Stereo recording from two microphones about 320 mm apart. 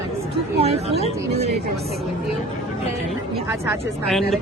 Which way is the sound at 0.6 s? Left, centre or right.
Centre.